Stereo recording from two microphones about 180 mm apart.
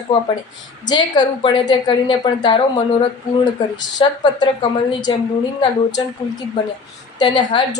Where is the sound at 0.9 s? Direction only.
25° left (ahead or behind).